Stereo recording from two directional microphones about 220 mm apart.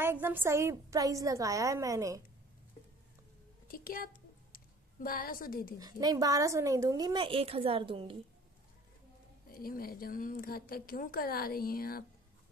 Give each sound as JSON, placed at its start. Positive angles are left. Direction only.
{"t": 0.0, "sound": "a woman's voice", "side_deg": -10}
{"t": 3.6, "sound": "a sound", "side_deg": 40}
{"t": 5.0, "sound": "speech", "side_deg": 40}
{"t": 5.8, "sound": "a woman's voice", "side_deg": -15}
{"t": 9.5, "sound": "speech", "side_deg": 40}